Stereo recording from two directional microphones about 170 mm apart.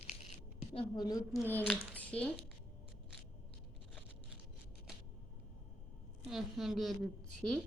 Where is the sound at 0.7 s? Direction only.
30° left (ahead or behind).